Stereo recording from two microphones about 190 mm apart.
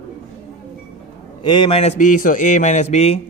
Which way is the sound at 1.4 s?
25° left (ahead or behind).